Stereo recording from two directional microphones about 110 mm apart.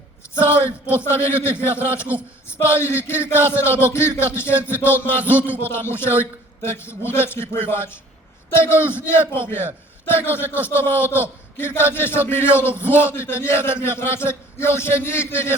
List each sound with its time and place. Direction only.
0.3 s a man's voice: 20° left (ahead or behind)